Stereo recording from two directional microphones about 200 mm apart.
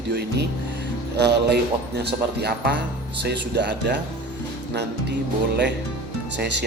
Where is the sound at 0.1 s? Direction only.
55° right (ahead or behind).